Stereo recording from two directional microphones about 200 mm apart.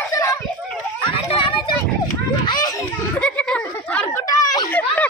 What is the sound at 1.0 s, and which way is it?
Children playing, 25° left (ahead or behind).